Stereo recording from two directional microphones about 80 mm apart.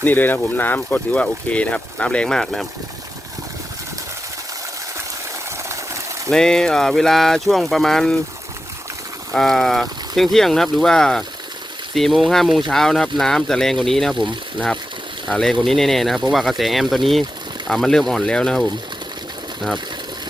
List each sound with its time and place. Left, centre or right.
0.0 s speech: left; by 2.6 s centre
5.6 s a sound: right
6.3 s speech: centre
9.3 s speech: centre
15.3 s speech: centre